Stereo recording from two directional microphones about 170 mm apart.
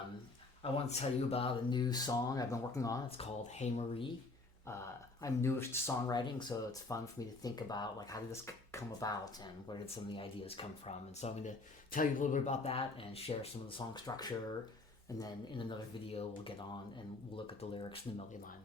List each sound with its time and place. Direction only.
0.6 s speech: 35° left (ahead or behind); by 3.0 s 20° left (ahead or behind)
3.1 s speech: 40° left (ahead or behind)
4.6 s speech: 15° left (ahead or behind)
9.8 s speech: 35° left (ahead or behind)